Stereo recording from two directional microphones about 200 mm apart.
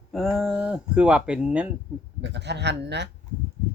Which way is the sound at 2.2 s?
60° right (ahead or behind).